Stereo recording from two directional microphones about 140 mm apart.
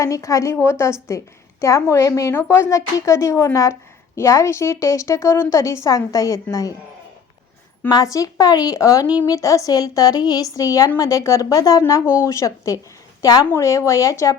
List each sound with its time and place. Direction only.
0.0 s a woman's voice: 25° left (ahead or behind)
7.9 s a woman's voice: 25° left (ahead or behind)